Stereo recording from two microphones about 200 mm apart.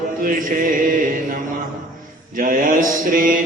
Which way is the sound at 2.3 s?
45° right (ahead or behind).